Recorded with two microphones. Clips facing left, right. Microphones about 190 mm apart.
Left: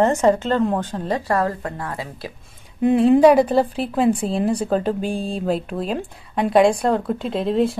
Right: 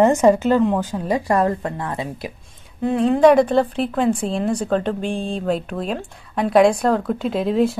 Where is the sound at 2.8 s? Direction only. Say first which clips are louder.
Left 1 dB; 15° left (ahead or behind).